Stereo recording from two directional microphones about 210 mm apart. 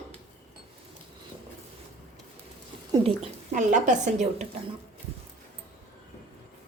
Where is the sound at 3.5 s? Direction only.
35° right (ahead or behind).